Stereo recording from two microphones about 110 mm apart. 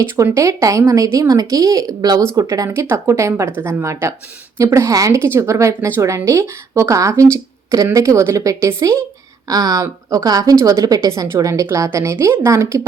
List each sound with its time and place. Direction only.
0.0 s a woman's voice: 25° right (ahead or behind)
2.6 s a woman's voice: 20° right (ahead or behind)